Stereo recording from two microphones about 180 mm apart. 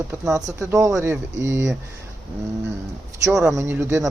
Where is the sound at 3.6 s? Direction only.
15° right (ahead or behind).